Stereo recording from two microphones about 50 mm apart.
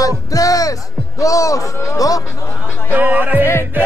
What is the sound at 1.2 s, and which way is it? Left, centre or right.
Speech, left.